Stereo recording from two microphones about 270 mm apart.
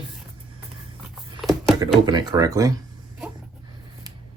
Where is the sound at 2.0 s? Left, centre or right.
Centre.